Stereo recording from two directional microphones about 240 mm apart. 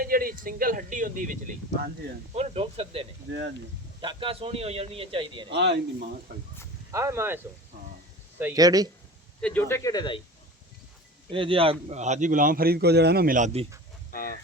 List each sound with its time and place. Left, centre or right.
0.0 s a man's voice: right
3.3 s speech: right
4.0 s a man's voice: right
5.5 s speech: right
6.9 s speech: centre
8.4 s speech: centre
9.4 s speech: centre
11.3 s a man's voice: right
14.1 s fowl: left